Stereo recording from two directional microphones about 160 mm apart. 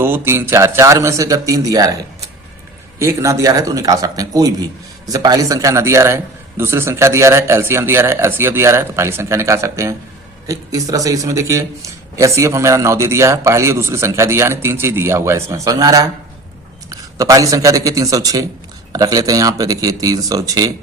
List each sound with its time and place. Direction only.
0.0 s a man's voice: 15° right (ahead or behind)
3.0 s a man's voice: 20° right (ahead or behind)